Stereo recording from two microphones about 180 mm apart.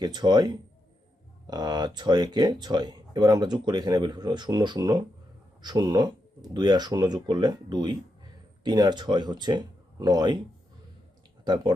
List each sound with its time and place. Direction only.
0.0 s speech: 25° right (ahead or behind)
11.4 s speech: 25° right (ahead or behind)